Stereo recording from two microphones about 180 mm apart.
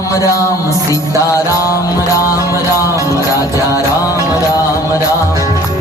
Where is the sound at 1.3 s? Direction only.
15° left (ahead or behind).